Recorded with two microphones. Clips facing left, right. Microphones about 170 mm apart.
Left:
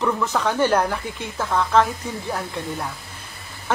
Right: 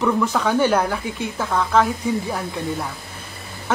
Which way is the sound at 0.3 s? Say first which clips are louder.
Right 2 dB; 10° right (ahead or behind).